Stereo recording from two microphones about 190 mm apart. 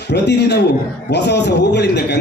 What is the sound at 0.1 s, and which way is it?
A man's voice, 60° left (ahead or behind).